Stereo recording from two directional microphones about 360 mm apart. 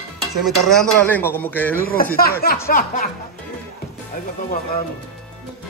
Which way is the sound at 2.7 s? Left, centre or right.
Left.